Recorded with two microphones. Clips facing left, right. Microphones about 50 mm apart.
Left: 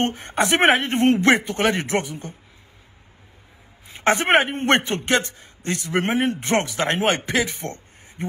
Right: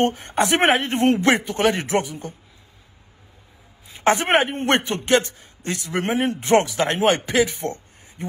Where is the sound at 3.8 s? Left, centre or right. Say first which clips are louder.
Even; left.